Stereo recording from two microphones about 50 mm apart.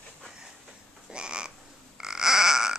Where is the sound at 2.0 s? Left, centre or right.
Centre.